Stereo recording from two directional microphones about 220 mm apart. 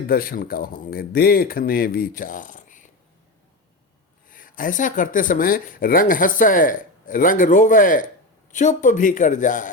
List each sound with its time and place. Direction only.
0.1 s speech: 40° left (ahead or behind)
4.3 s speech: 40° left (ahead or behind)